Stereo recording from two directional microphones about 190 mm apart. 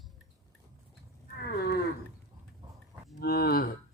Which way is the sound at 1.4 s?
55° left (ahead or behind).